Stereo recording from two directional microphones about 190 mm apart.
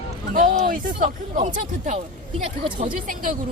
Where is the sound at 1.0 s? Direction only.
35° right (ahead or behind).